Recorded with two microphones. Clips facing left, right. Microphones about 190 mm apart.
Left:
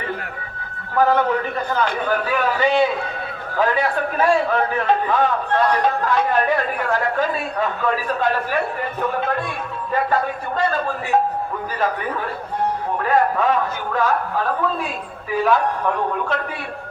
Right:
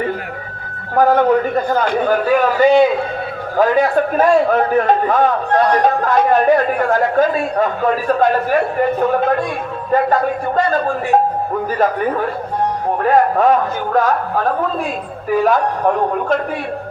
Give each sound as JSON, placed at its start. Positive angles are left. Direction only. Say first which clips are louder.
{"t": 0.9, "sound": "a man's voice", "louder": "right 5 dB", "side_deg": -45}
{"t": 9.9, "sound": "a man's voice", "louder": "right 6 dB", "side_deg": -45}
{"t": 13.1, "sound": "a man's voice", "louder": "right 5 dB", "side_deg": -45}
{"t": 15.4, "sound": "a man's voice", "louder": "right 3 dB", "side_deg": -45}